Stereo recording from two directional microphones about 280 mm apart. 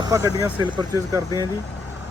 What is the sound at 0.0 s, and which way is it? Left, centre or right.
A man's voice, centre.